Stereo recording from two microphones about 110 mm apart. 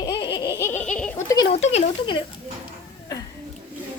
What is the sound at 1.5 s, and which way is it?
Speech, 75° left (ahead or behind).